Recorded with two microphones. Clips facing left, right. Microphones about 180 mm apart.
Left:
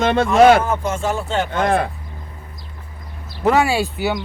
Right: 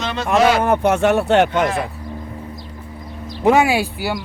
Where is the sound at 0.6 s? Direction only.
65° right (ahead or behind).